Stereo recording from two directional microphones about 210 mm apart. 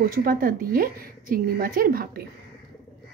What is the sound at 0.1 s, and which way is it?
Speech, 40° right (ahead or behind).